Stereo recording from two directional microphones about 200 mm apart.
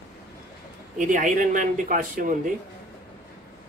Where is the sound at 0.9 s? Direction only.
40° right (ahead or behind).